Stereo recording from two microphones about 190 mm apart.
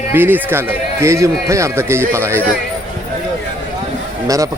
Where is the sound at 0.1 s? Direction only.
10° right (ahead or behind).